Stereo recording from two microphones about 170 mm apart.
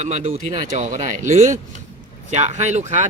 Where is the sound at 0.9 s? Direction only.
45° right (ahead or behind).